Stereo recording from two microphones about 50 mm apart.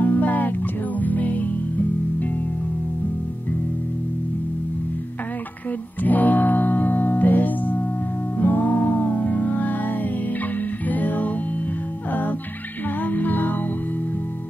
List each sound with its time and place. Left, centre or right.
0.0 s music: left
6.0 s music: left